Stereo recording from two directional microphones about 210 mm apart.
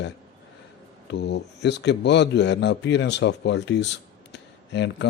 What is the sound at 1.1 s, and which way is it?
A man's voice, 55° left (ahead or behind).